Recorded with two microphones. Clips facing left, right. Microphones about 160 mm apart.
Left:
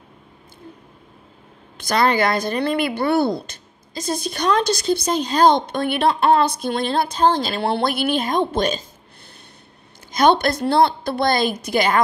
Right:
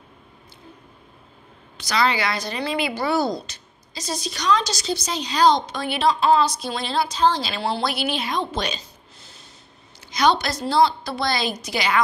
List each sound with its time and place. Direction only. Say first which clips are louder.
1.8 s a woman's voice: left 4 dB; 50° left (ahead or behind)